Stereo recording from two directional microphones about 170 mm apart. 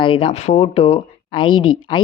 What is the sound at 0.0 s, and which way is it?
Speech, 30° left (ahead or behind).